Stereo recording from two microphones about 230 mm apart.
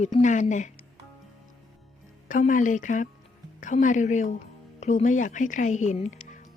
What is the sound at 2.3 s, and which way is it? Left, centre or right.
A woman's voice, left.